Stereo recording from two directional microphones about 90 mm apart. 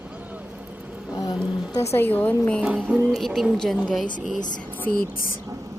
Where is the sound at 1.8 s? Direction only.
30° left (ahead or behind).